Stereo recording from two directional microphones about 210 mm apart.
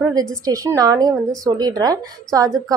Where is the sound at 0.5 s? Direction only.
15° right (ahead or behind).